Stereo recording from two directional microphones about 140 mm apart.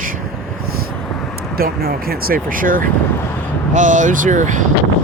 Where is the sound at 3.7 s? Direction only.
60° right (ahead or behind).